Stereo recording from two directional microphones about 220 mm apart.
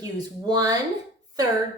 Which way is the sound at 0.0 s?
15° right (ahead or behind).